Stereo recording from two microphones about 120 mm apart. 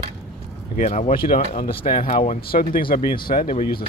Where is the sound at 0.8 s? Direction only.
80° left.